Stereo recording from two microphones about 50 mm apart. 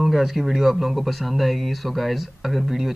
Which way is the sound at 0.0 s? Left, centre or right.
Centre.